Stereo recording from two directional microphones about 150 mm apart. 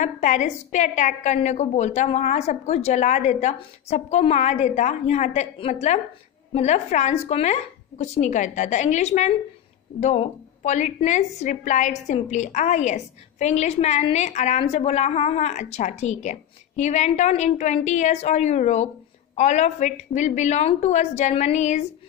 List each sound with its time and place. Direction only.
0.0 s a woman's voice: 55° left (ahead or behind)